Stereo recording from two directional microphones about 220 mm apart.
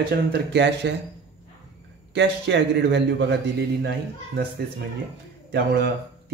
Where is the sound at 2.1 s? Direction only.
55° right (ahead or behind).